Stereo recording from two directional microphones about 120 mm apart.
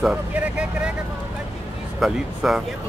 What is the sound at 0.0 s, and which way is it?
Vehicle, 10° right (ahead or behind).